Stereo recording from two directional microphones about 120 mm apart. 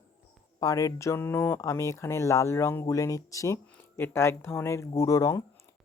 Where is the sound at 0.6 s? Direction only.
30° left (ahead or behind).